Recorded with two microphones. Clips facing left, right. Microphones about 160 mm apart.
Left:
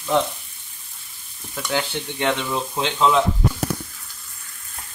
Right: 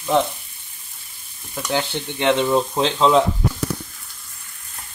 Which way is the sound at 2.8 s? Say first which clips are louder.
Right 1 dB; 30° right (ahead or behind).